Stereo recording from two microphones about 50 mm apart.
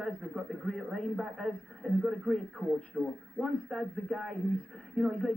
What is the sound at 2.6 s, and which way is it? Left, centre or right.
Speech, left.